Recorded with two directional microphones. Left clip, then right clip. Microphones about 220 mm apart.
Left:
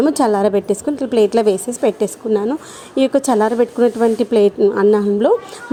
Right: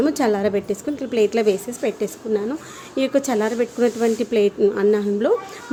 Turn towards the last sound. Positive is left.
turn(degrees=20)  # may be behind; listen again after turning